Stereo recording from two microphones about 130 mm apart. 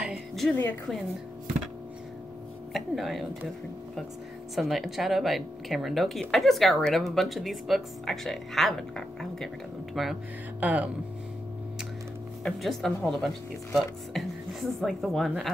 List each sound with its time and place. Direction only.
0.0 s music: 5° right (ahead or behind)
2.7 s speech: centre (ahead or behind)
4.6 s speech: centre (ahead or behind)
10.6 s speech: 10° right (ahead or behind)
12.4 s speech: centre (ahead or behind)